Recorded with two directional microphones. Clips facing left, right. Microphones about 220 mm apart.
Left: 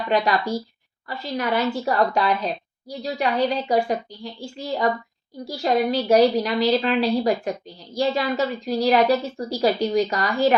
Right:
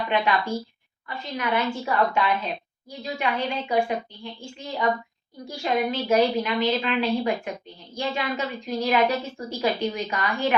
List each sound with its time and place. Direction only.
0.1 s a woman's voice: 35° left (ahead or behind)